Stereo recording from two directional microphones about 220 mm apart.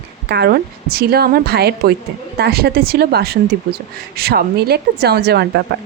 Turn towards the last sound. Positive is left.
turn(degrees=-50)  # may be behind; listen again after turning